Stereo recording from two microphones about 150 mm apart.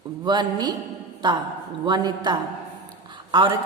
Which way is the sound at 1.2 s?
30° right (ahead or behind).